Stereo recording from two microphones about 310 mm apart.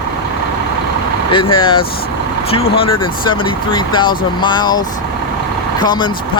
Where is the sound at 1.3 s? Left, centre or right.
Centre.